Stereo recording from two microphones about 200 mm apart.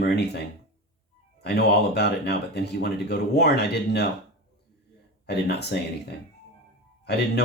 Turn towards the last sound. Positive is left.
turn(degrees=55)  # may be behind; listen again after turning